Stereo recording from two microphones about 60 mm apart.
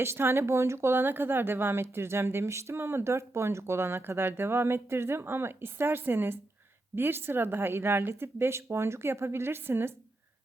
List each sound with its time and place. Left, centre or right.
0.0 s speech: right